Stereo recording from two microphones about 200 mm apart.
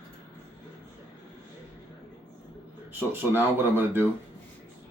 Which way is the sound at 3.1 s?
10° right (ahead or behind).